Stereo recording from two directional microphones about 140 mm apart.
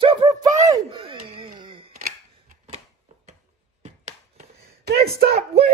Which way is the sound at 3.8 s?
50° right (ahead or behind).